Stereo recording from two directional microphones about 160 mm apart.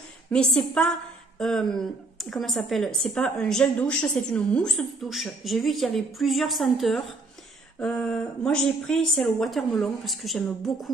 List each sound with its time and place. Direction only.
0.3 s a woman's voice: 5° left (ahead or behind)